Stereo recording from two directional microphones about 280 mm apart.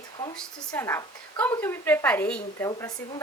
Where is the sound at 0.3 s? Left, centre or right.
Centre.